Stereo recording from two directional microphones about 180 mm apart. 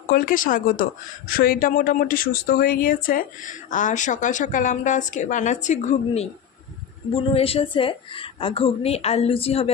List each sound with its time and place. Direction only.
0.1 s a woman's voice: 55° left (ahead or behind); by 9.7 s 35° left (ahead or behind)